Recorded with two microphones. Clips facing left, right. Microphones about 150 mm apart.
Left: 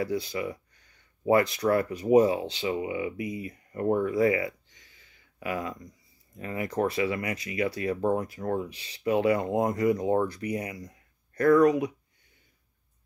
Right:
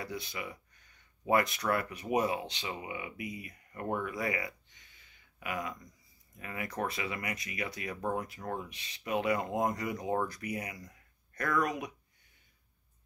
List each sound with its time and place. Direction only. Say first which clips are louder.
0.0 s speech: left 10 dB; 30° left (ahead or behind)